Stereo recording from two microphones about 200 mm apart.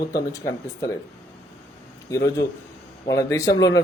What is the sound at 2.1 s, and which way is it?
Speech, 15° left (ahead or behind).